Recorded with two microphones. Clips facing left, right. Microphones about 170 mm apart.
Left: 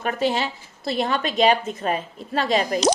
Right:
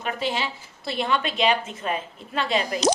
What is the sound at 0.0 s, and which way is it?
A woman's voice, 45° left (ahead or behind).